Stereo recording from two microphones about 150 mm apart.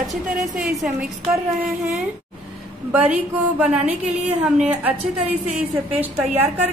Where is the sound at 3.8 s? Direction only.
45° right (ahead or behind).